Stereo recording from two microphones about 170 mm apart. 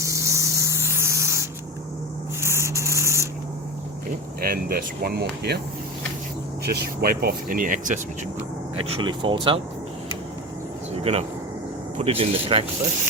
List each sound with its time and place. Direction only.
0.0 s spray: 20° right (ahead or behind)
4.4 s speech: 60° right (ahead or behind)
6.7 s speech: 60° right (ahead or behind)
8.9 s speech: 30° right (ahead or behind)
10.9 s a sound: 40° right (ahead or behind)
11.9 s speech: 35° right (ahead or behind)